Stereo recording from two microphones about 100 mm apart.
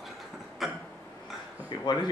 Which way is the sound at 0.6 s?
Centre (ahead or behind).